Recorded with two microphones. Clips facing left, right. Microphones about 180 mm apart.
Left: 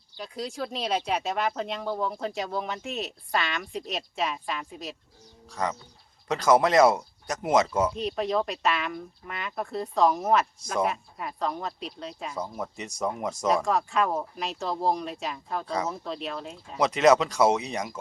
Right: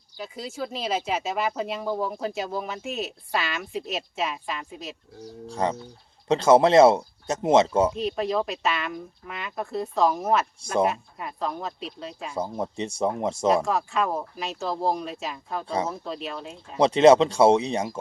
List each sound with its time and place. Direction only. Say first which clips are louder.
0.2 s speech: even; 5° right (ahead or behind)
5.5 s speech: right 4 dB; 30° right (ahead or behind)
7.9 s speech: right 1 dB; centre (ahead or behind)
12.3 s speech: right 7 dB; 30° right (ahead or behind)
13.7 s speech: even; centre (ahead or behind)
15.6 s speech: right 3 dB; 30° right (ahead or behind)
15.9 s speech: right 1 dB; centre (ahead or behind)
16.7 s speech: right 5 dB; 30° right (ahead or behind)